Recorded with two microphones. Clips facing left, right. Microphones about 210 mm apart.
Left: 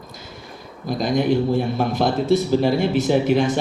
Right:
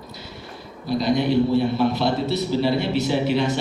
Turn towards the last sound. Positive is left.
turn(degrees=50)  # may be behind; listen again after turning